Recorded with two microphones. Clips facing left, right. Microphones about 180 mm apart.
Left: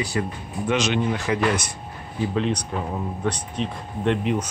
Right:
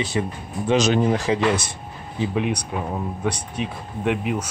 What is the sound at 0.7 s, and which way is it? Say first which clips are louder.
Speech: right 4 dB; 40° right (ahead or behind).